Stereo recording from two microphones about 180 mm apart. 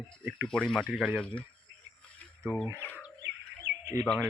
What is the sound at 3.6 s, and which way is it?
Bird, 70° right (ahead or behind).